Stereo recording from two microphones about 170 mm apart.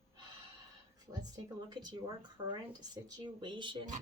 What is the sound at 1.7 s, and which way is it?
Speech, 25° right (ahead or behind).